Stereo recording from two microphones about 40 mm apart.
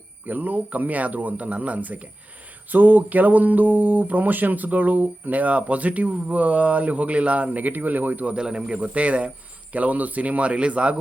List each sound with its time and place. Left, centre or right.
0.3 s speech: right
2.6 s a sound: right
8.3 s speech: centre
8.7 s speech: right